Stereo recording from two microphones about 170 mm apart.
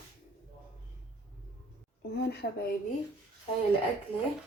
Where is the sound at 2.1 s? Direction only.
75° left (ahead or behind).